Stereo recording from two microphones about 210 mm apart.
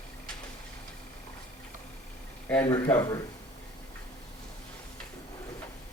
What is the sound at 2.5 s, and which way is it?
Speech, 15° left (ahead or behind).